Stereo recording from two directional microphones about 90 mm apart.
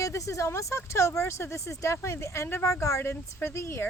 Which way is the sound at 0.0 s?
35° left (ahead or behind).